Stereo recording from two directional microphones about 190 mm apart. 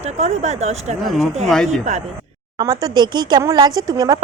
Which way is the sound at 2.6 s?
20° right (ahead or behind).